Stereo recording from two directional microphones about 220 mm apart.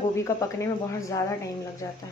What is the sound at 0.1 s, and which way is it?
Speech, 15° left (ahead or behind).